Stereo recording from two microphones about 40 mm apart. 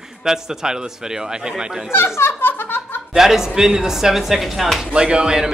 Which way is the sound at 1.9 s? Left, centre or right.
Left.